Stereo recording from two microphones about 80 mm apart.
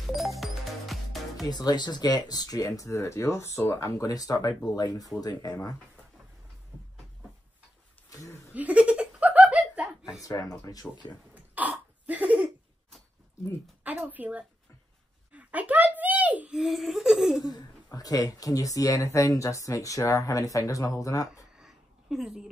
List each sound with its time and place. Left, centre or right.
0.0 s music: centre
1.5 s speech: left
6.7 s train: centre
8.1 s a sound: left
8.5 s laughter: centre
10.2 s speech: left
11.3 s cough: centre
13.8 s speech: right
15.3 s a sound: centre
16.5 s a sound: centre
17.9 s speech: left
21.5 s a sound: centre